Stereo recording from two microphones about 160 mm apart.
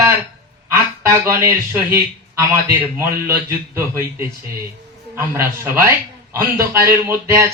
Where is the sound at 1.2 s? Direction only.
15° right (ahead or behind).